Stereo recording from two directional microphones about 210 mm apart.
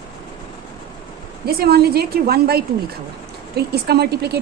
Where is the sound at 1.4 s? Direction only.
50° right (ahead or behind).